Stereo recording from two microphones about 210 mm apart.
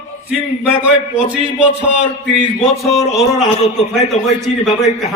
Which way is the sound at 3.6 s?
30° left (ahead or behind).